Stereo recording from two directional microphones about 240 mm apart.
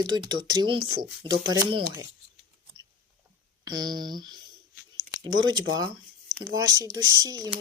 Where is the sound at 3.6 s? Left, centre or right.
Centre.